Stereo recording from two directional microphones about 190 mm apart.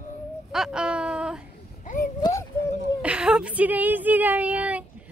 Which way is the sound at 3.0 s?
5° right (ahead or behind).